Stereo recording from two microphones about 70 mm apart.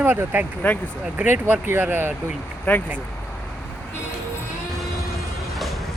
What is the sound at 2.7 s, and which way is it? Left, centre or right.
Speech, left.